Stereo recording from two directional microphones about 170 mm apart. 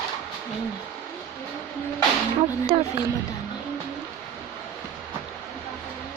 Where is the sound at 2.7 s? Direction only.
30° right (ahead or behind).